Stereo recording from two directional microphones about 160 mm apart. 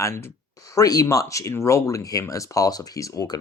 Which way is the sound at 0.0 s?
15° left (ahead or behind).